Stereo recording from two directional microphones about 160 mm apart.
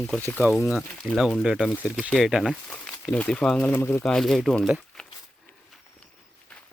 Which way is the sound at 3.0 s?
10° left (ahead or behind).